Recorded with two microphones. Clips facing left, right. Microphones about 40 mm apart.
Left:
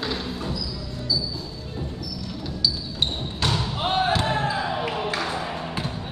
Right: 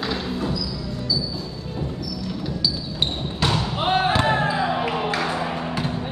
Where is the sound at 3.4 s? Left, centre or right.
Centre.